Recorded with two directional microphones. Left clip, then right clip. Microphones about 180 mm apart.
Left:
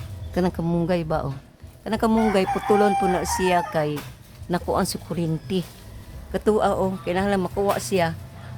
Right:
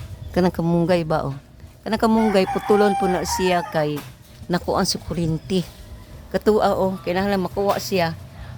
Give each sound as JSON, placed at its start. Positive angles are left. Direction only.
{"t": 0.3, "sound": "speech", "side_deg": -40}
{"t": 1.8, "sound": "speech", "side_deg": -30}